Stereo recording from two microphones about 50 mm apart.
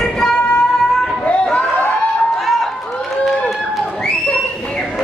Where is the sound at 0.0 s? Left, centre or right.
Centre.